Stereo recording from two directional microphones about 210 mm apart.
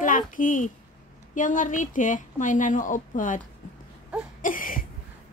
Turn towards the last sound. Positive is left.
turn(degrees=40)  # may be behind; listen again after turning